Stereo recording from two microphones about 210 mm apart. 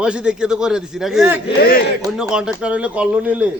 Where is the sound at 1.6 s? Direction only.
45° left (ahead or behind).